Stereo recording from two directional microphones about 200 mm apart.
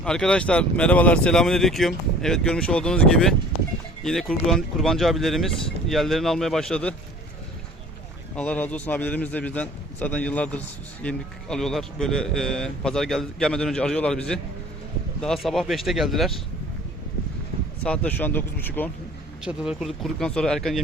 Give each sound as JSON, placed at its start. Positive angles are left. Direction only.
{"t": 0.0, "sound": "a man's voice", "side_deg": 5}
{"t": 8.4, "sound": "a man's voice", "side_deg": 5}
{"t": 17.8, "sound": "a man's voice", "side_deg": 5}
{"t": 19.5, "sound": "a man's voice", "side_deg": -5}